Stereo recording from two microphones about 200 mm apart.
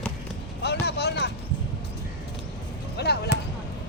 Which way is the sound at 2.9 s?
55° left (ahead or behind).